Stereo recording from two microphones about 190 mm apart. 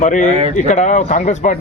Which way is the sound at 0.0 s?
40° left (ahead or behind).